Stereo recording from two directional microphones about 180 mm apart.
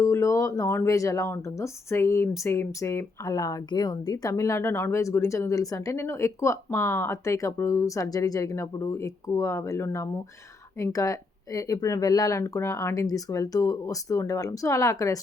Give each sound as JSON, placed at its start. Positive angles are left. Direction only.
{"t": 0.0, "sound": "speech", "side_deg": 15}